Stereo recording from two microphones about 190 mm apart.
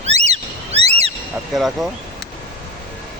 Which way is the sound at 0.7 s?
35° right (ahead or behind).